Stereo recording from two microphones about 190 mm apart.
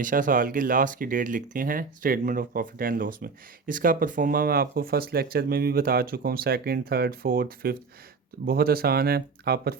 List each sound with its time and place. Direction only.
0.0 s speech: 45° right (ahead or behind)